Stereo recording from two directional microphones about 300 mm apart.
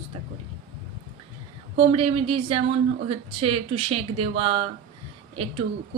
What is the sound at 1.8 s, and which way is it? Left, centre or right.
A woman's voice, centre.